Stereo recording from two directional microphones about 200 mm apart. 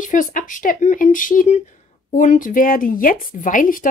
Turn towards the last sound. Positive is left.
turn(degrees=40)  # may be behind; listen again after turning